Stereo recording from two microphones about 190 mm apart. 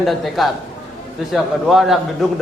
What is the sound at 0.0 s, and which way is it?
A man's voice, centre (ahead or behind).